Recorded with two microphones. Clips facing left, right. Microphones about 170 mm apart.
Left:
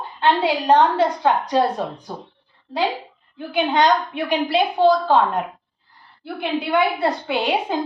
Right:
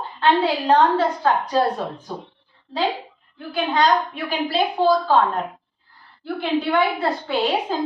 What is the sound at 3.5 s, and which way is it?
Speech, 20° left (ahead or behind).